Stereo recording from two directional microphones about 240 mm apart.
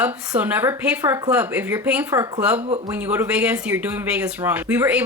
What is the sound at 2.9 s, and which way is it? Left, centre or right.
Speech, centre.